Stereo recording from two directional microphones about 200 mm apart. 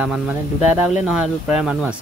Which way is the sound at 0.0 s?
5° right (ahead or behind).